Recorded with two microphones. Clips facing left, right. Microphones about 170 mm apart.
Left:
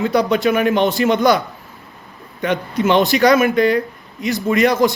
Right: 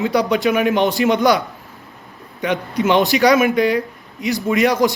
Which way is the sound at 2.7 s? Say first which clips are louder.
Left 1 dB; 15° right (ahead or behind).